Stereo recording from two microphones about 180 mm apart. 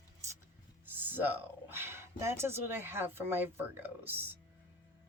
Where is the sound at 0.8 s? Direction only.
10° right (ahead or behind).